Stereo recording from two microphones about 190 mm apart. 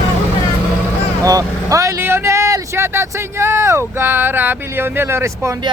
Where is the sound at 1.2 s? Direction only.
15° right (ahead or behind).